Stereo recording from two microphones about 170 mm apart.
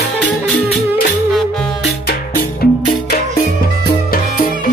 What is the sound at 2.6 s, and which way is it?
Music, 65° left (ahead or behind).